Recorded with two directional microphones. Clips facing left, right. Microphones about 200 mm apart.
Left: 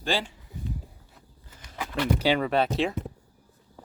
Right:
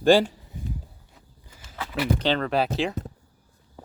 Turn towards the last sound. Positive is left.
turn(degrees=0)  # may be behind; listen again after turning